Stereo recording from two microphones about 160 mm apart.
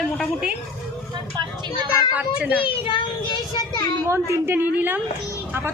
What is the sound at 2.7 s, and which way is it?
Speech, 30° left (ahead or behind).